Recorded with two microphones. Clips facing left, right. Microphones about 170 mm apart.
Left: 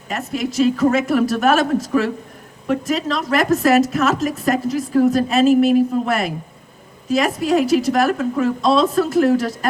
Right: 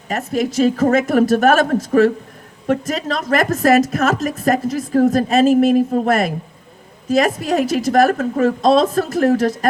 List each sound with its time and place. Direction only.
0.1 s speech: 40° right (ahead or behind)